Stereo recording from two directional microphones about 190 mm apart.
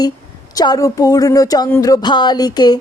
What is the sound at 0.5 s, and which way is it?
Speech, 20° left (ahead or behind).